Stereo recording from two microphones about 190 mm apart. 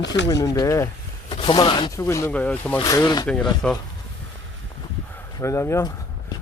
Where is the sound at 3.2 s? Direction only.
5° left (ahead or behind).